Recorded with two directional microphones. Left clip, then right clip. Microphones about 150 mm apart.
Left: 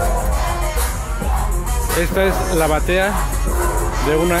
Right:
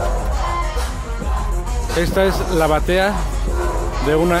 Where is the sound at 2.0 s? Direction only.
20° right (ahead or behind).